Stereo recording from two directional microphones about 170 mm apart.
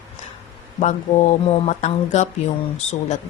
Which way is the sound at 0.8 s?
40° left (ahead or behind).